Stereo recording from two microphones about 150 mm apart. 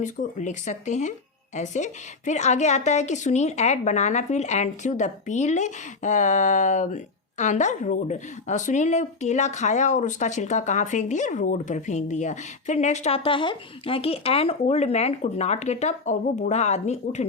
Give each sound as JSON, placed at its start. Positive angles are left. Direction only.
{"t": 0.0, "sound": "a woman's voice", "side_deg": 55}